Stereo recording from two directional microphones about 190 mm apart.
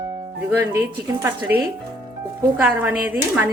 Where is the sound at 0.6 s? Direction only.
15° right (ahead or behind).